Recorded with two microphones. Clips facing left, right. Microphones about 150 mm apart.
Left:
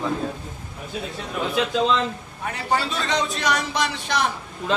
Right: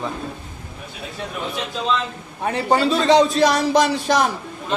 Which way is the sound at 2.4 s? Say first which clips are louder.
Right 6 dB; 30° right (ahead or behind).